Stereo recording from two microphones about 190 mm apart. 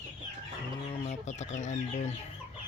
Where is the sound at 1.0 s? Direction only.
35° left (ahead or behind).